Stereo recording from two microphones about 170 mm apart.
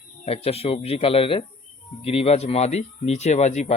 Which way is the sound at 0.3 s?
35° left (ahead or behind).